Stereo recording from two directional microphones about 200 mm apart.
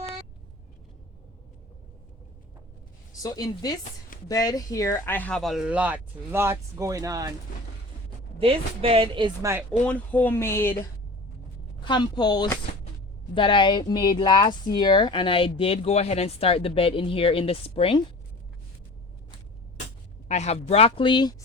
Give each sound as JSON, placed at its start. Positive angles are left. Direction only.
{"t": 3.2, "sound": "speech", "side_deg": 20}
{"t": 8.4, "sound": "speech", "side_deg": -25}
{"t": 9.8, "sound": "speech", "side_deg": 5}
{"t": 11.8, "sound": "speech", "side_deg": 20}
{"t": 20.2, "sound": "speech", "side_deg": 35}